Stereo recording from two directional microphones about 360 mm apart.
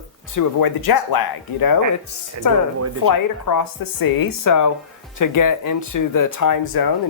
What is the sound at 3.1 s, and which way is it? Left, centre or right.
Speech, left.